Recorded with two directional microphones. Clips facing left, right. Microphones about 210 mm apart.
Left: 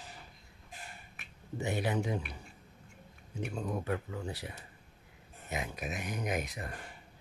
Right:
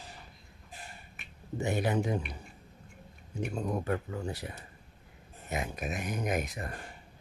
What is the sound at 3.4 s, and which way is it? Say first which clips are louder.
Speech: right 3 dB; 45° right (ahead or behind).